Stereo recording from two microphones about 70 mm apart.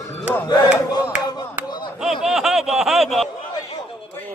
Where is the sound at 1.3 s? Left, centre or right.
Left.